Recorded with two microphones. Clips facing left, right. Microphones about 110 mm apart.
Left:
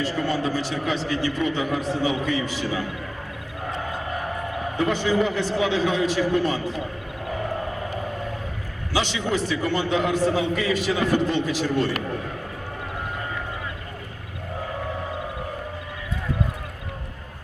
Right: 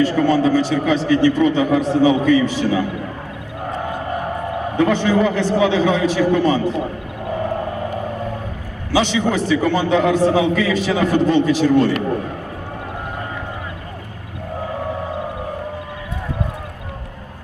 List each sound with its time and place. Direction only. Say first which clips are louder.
0.0 s a man's voice: right 9 dB; 75° right (ahead or behind)
4.8 s a man's voice: right 6 dB; 75° right (ahead or behind)
9.0 s a man's voice: right 7 dB; 80° right